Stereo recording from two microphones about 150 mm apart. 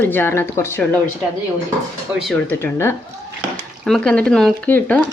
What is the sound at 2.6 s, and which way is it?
Speech, 15° left (ahead or behind).